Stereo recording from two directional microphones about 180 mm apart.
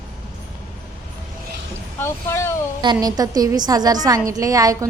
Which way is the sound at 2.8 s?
25° right (ahead or behind).